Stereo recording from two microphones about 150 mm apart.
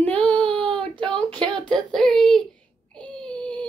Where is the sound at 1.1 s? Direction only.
30° right (ahead or behind).